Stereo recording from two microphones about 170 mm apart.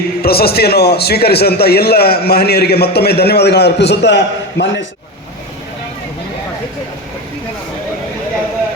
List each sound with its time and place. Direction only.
0.2 s a man's voice: 65° left (ahead or behind); by 4.8 s 90° left